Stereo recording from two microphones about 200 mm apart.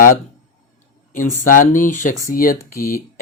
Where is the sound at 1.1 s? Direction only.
40° left (ahead or behind).